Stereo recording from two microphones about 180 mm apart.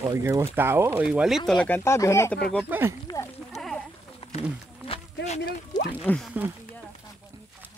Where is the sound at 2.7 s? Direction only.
10° right (ahead or behind).